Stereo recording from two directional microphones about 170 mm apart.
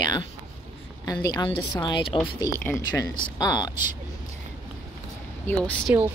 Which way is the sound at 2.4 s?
15° left (ahead or behind).